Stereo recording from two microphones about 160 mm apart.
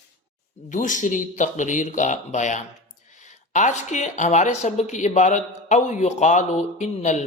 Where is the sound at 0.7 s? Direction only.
55° left (ahead or behind).